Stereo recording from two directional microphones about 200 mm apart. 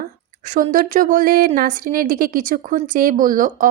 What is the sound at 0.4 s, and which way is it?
A woman's voice, 40° right (ahead or behind).